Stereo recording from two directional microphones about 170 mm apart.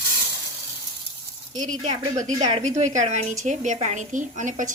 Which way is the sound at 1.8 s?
45° right (ahead or behind).